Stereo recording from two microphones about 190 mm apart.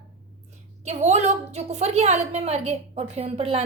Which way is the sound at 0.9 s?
35° right (ahead or behind).